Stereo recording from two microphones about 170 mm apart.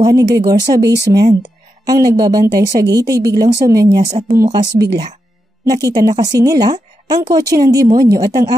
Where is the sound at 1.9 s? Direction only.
25° right (ahead or behind).